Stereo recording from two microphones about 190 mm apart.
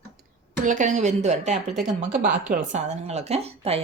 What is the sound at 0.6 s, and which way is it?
A woman's voice, 40° right (ahead or behind).